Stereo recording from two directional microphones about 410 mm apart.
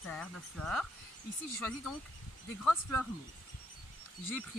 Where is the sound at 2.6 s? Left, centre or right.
Centre.